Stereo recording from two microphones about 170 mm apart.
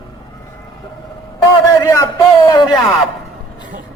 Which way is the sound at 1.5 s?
20° left (ahead or behind).